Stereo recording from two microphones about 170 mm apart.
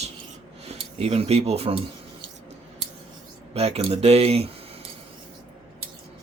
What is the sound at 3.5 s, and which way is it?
Speech, 35° right (ahead or behind).